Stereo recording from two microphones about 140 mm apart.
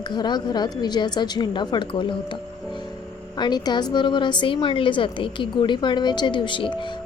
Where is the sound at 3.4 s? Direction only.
30° left (ahead or behind).